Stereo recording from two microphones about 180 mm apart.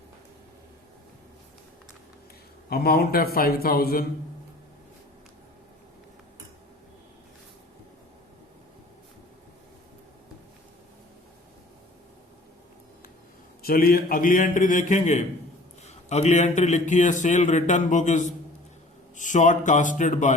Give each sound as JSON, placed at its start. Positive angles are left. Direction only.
{"t": 2.6, "sound": "a man's voice", "side_deg": 60}
{"t": 13.6, "sound": "a man's voice", "side_deg": 55}